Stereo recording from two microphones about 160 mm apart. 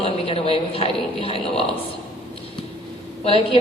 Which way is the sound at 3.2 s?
35° left (ahead or behind).